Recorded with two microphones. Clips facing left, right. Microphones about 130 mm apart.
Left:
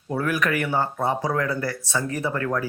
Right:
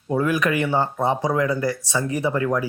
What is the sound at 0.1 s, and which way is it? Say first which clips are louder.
Speech: right 3 dB; 20° right (ahead or behind).